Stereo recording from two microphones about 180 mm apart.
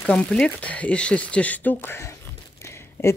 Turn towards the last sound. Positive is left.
turn(degrees=10)  # may be behind; listen again after turning